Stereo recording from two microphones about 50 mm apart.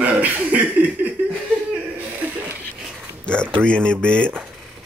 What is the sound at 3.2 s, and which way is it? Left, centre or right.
Speech, left.